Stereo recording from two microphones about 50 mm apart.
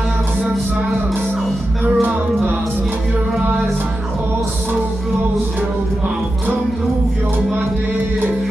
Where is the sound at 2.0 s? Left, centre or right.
Right.